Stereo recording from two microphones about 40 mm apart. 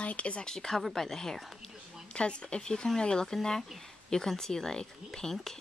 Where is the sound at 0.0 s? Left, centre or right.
Left.